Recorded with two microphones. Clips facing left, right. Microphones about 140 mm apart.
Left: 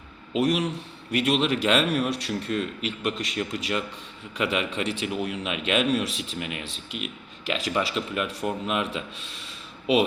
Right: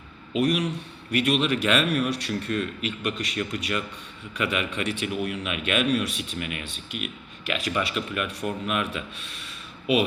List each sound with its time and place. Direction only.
0.3 s speech: 25° left (ahead or behind)